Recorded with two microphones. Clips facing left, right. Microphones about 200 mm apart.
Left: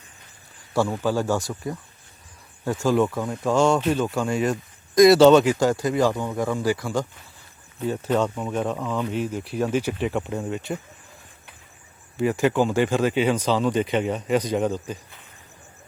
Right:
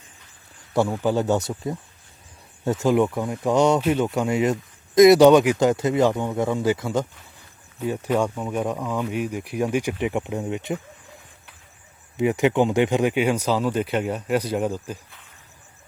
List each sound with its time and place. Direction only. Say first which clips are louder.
1.0 s a man's voice: right 2 dB; 20° right (ahead or behind)
7.8 s a man's voice: even; 10° right (ahead or behind)
12.1 s speech: right 1 dB; 20° right (ahead or behind)